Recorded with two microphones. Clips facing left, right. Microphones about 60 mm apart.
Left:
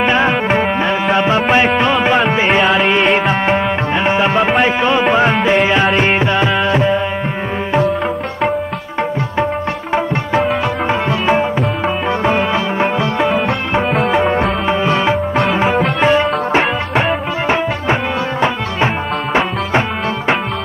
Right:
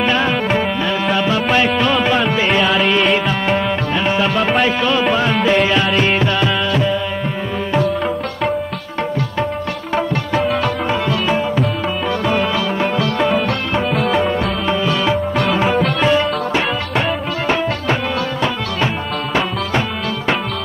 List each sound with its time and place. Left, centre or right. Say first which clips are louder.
0.0 s music: left 3 dB; left
2.6 s music: left 2 dB; centre
3.3 s tabla: left 3 dB; left
4.6 s music: left 2 dB; left
5.3 s music: left 2 dB; centre
9.9 s music: left 2 dB; left
13.9 s music: left 2 dB; centre
14.2 s music: left 3 dB; left
15.7 s music: left 2 dB; centre
16.1 s music: left 3 dB; left